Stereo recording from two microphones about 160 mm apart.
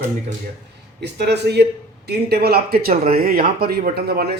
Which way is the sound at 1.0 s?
90° right.